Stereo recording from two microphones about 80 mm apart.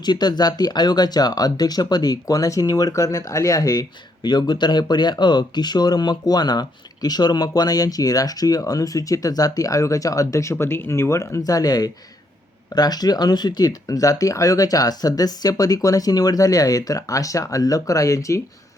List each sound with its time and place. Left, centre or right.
0.0 s speech: left
10.5 s speech: left